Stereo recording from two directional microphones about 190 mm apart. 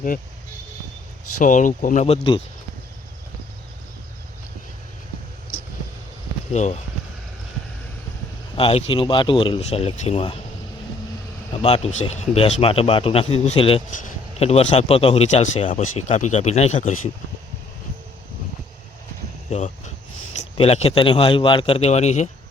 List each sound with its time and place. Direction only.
1.4 s speech: 45° left (ahead or behind)
6.5 s speech: 35° left (ahead or behind)
8.5 s speech: 30° left (ahead or behind)
11.6 s speech: 35° left (ahead or behind)
19.5 s speech: 35° left (ahead or behind)